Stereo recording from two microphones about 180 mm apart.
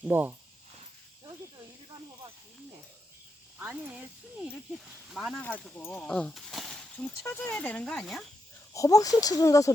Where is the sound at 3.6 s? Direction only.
10° right (ahead or behind).